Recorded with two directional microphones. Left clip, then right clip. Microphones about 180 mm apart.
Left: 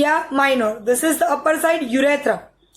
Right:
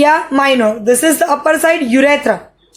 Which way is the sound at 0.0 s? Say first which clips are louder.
Right 6 dB; 20° right (ahead or behind).